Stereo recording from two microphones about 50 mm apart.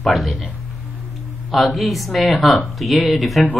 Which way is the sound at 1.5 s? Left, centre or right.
Centre.